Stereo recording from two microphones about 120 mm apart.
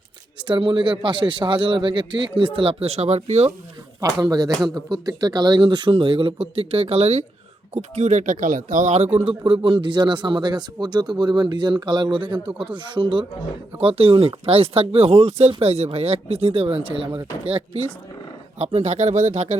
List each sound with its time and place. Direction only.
0.4 s a man's voice: 40° right (ahead or behind); by 3.5 s 60° right (ahead or behind)
4.0 s speech: 35° right (ahead or behind); by 9.3 s 60° right (ahead or behind)
9.4 s speech: 45° right (ahead or behind)
13.7 s speech: 55° right (ahead or behind)